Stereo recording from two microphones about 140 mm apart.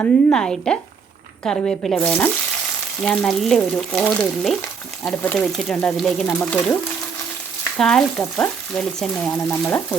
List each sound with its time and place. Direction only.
0.0 s frying: 5° left (ahead or behind)
6.4 s speech: 10° left (ahead or behind)
7.8 s frying: 5° left (ahead or behind)
9.6 s speech: 15° left (ahead or behind)